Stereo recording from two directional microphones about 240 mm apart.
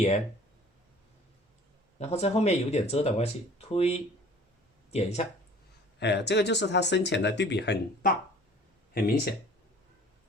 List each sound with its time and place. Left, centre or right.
2.0 s speech: left
6.0 s speech: left